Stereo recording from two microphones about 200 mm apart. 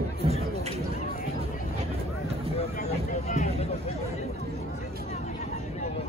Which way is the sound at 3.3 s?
35° left (ahead or behind).